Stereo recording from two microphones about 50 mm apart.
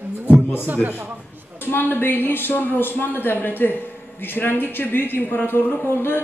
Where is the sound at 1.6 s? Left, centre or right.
Left.